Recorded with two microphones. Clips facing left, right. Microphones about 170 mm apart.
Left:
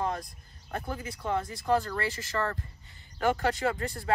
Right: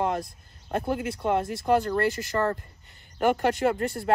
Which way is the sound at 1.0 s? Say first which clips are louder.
Right 6 dB; 65° right (ahead or behind).